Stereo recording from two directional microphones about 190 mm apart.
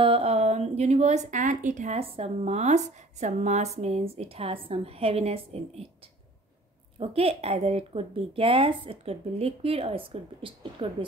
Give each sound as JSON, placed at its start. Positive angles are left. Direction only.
{"t": 0.0, "sound": "a woman's voice", "side_deg": -30}
{"t": 7.0, "sound": "a woman's voice", "side_deg": -30}